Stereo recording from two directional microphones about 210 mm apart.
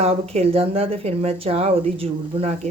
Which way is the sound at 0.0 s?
30° right (ahead or behind).